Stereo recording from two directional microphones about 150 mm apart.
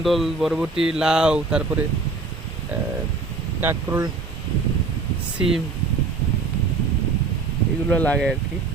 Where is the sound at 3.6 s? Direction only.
15° right (ahead or behind).